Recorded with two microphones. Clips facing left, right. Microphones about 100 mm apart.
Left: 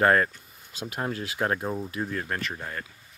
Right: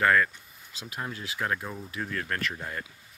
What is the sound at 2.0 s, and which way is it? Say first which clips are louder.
Speech: right 2 dB; 15° left (ahead or behind).